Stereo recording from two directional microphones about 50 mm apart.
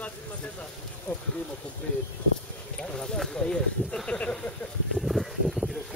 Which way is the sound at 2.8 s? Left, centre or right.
Centre.